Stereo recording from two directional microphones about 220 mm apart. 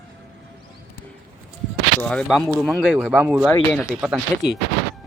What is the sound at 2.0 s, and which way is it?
Speech, 5° left (ahead or behind).